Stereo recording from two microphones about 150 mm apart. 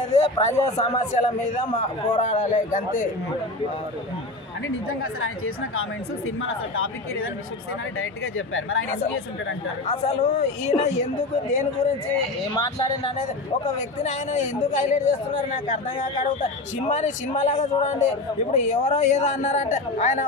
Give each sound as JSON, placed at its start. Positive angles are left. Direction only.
{"t": 0.1, "sound": "a man's voice", "side_deg": 50}
{"t": 9.8, "sound": "a man's voice", "side_deg": 50}
{"t": 12.5, "sound": "speech", "side_deg": 30}
{"t": 13.7, "sound": "a man's voice", "side_deg": 50}